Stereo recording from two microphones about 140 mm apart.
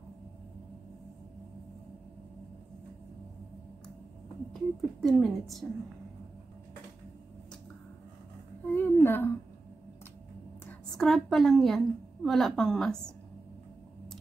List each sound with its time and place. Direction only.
4.6 s a woman's voice: centre (ahead or behind)
8.7 s humming: 15° left (ahead or behind)
11.0 s a woman's voice: centre (ahead or behind)